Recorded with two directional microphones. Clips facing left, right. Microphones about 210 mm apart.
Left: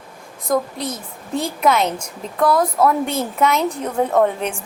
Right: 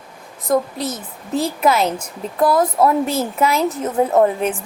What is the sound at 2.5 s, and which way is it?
Speech, 25° right (ahead or behind).